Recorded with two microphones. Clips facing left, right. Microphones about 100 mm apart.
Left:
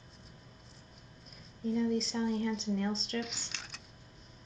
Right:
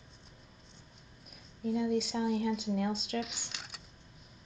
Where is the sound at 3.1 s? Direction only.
Centre (ahead or behind).